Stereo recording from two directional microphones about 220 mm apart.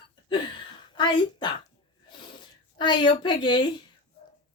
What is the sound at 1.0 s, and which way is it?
Speech, 20° left (ahead or behind).